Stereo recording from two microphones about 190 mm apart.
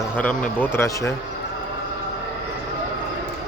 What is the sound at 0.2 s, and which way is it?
Speech, 5° left (ahead or behind).